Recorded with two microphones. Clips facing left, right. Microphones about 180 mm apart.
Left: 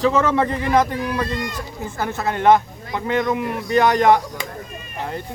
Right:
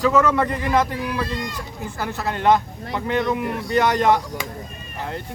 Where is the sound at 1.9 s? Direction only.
20° left (ahead or behind).